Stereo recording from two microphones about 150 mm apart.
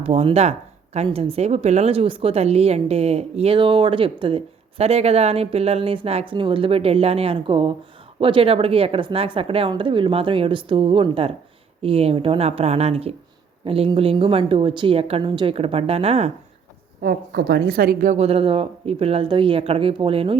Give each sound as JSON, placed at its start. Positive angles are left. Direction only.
{"t": 0.0, "sound": "speech", "side_deg": -40}
{"t": 17.0, "sound": "a woman's voice", "side_deg": -85}
{"t": 18.1, "sound": "speech", "side_deg": -40}